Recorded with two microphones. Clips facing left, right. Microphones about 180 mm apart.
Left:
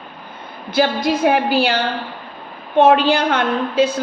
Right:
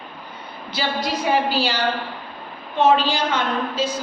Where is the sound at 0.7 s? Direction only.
55° left (ahead or behind).